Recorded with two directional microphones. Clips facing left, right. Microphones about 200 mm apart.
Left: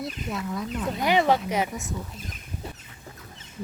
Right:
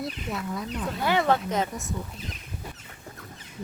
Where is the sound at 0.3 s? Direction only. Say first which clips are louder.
Left 4 dB; centre (ahead or behind).